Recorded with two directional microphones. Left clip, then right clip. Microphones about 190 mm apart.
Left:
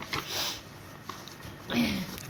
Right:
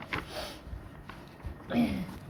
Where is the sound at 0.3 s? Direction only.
50° right (ahead or behind).